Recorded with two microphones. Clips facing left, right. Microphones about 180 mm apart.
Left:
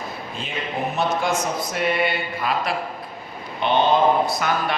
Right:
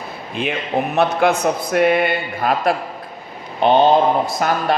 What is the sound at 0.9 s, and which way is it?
Speech, 65° right (ahead or behind).